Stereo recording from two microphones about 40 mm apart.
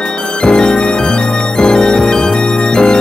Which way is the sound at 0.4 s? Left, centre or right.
Centre.